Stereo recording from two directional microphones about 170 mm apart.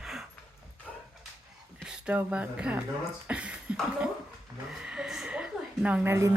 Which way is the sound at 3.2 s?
5° right (ahead or behind).